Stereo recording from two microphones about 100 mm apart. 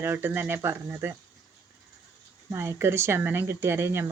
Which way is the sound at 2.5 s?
25° right (ahead or behind).